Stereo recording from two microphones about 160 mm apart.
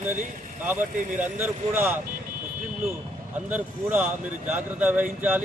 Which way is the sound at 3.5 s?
10° right (ahead or behind).